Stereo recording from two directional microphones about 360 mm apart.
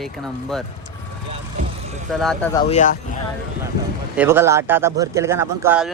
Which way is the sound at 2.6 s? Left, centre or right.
Left.